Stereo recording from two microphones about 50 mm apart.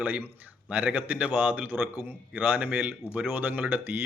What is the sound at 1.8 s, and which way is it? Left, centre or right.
Speech, right.